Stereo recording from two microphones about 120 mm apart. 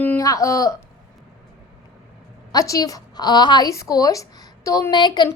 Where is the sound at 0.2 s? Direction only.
25° left (ahead or behind).